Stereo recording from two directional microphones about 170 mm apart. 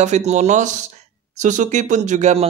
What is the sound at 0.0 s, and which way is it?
Speech, 40° right (ahead or behind).